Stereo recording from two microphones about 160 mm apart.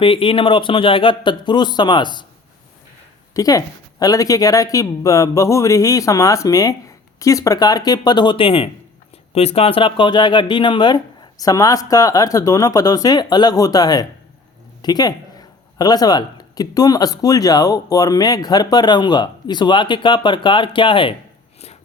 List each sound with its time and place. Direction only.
0.0 s a man's voice: 35° left (ahead or behind)
3.3 s speech: 20° left (ahead or behind)